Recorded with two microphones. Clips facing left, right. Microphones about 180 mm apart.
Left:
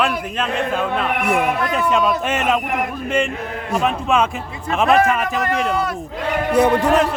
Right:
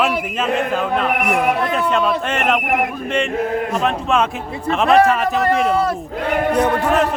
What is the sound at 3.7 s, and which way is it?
A man's voice, 5° left (ahead or behind).